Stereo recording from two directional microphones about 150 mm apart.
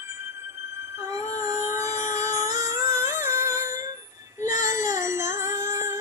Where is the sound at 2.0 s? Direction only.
20° right (ahead or behind).